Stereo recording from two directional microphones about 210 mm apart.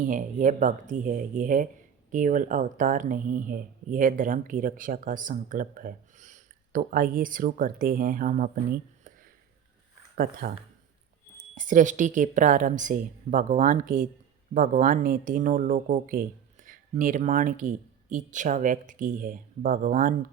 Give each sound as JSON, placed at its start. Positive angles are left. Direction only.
{"t": 0.0, "sound": "speech", "side_deg": -40}
{"t": 11.5, "sound": "speech", "side_deg": -40}